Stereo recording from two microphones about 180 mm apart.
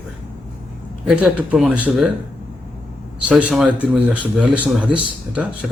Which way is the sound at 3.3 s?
5° right (ahead or behind).